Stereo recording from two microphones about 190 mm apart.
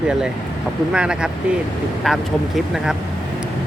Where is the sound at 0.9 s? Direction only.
5° right (ahead or behind).